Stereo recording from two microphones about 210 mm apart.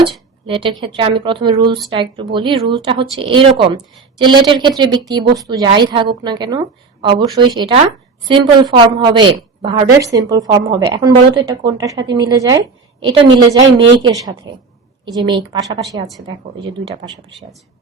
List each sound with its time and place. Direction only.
0.0 s a woman's voice: 25° right (ahead or behind)
14.0 s a woman's voice: 15° right (ahead or behind)